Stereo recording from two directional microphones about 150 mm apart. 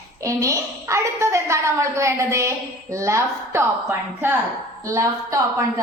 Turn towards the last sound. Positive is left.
turn(degrees=-20)  # may be behind; listen again after turning